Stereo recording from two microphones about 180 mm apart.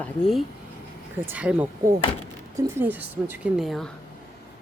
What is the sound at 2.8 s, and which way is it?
A woman's voice, 10° right (ahead or behind).